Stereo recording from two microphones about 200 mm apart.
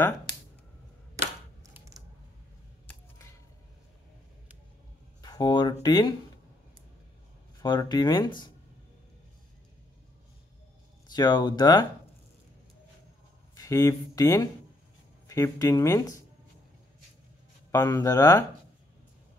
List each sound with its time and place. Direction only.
1.6 s typing: 15° right (ahead or behind)
5.2 s speech: 20° left (ahead or behind)
7.6 s speech: 20° left (ahead or behind)
11.1 s speech: 15° left (ahead or behind)
13.6 s speech: 15° left (ahead or behind)
17.6 s speech: 15° left (ahead or behind)